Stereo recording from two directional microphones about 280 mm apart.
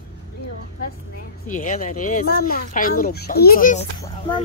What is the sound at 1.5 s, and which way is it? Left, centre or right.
A child's voice, left.